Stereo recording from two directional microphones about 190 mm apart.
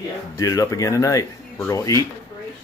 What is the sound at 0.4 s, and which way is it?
Speech, 15° left (ahead or behind).